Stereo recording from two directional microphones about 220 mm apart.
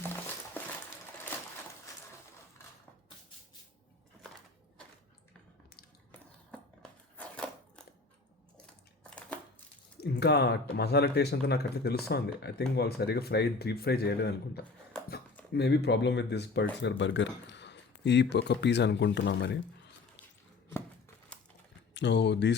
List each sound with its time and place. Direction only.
6.8 s a sound: 5° left (ahead or behind)
9.0 s crushing: 5° left (ahead or behind)
10.0 s speech: 50° left (ahead or behind)
21.9 s speech: 55° left (ahead or behind)